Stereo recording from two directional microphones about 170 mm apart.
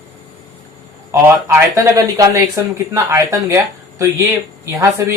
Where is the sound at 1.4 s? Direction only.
15° right (ahead or behind).